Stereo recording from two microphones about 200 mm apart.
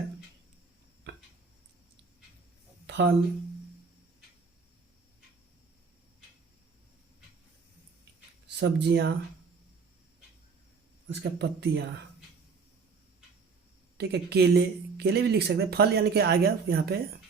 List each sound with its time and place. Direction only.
2.8 s a sound: 60° right (ahead or behind)
8.4 s speech: 55° right (ahead or behind)
11.1 s speech: 60° right (ahead or behind)
14.0 s speech: 55° right (ahead or behind)